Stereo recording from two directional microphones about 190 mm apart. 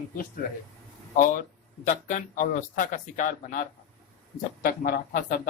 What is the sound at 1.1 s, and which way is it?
Speech, 45° left (ahead or behind).